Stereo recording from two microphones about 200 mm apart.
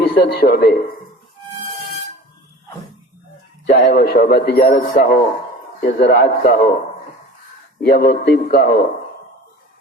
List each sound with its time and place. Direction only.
0.0 s speech: 55° left (ahead or behind)
3.8 s speech: 45° left (ahead or behind)
5.8 s speech: 55° left (ahead or behind)